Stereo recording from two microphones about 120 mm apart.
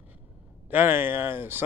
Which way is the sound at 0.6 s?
15° right (ahead or behind).